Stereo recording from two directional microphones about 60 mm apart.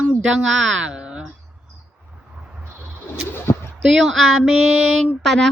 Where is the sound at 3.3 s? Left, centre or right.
Left.